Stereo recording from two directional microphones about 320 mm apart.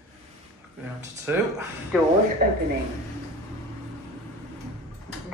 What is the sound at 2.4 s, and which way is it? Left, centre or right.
Speech, right.